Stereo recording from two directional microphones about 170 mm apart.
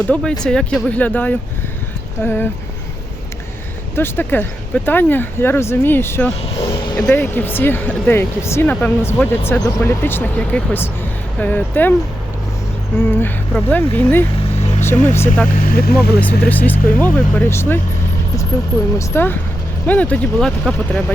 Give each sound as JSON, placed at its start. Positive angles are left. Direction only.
{"t": 0.1, "sound": "speech", "side_deg": 5}
{"t": 3.9, "sound": "speech", "side_deg": 15}
{"t": 13.0, "sound": "speech", "side_deg": 10}
{"t": 15.4, "sound": "speech", "side_deg": 55}
{"t": 16.2, "sound": "speech", "side_deg": 10}
{"t": 18.9, "sound": "speech", "side_deg": 15}